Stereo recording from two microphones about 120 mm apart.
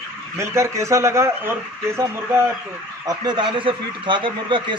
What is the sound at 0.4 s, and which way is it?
Speech, 25° right (ahead or behind).